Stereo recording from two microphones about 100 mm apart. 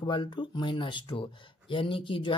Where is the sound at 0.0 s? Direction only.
50° left (ahead or behind).